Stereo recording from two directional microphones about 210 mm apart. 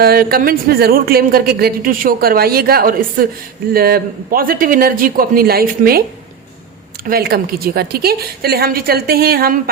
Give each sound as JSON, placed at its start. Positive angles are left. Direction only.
{"t": 0.0, "sound": "speech", "side_deg": -45}
{"t": 7.0, "sound": "speech", "side_deg": -45}